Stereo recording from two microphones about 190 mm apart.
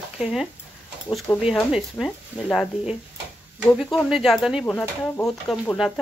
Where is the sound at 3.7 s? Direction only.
Centre (ahead or behind).